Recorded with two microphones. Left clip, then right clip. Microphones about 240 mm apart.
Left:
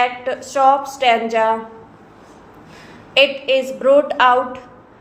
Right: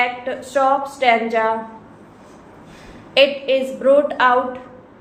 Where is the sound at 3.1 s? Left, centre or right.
Left.